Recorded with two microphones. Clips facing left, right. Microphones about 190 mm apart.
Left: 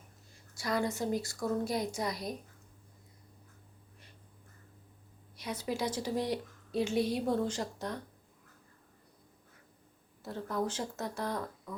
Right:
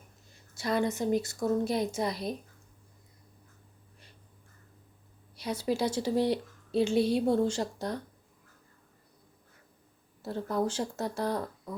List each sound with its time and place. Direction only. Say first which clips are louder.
0.5 s a woman's voice: right 4 dB; 25° right (ahead or behind)
5.4 s a woman's voice: right 5 dB; 30° right (ahead or behind)
10.2 s speech: right 4 dB; 30° right (ahead or behind)